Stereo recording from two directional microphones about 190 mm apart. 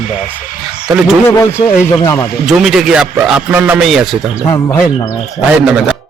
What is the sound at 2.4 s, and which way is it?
A man's voice, centre (ahead or behind).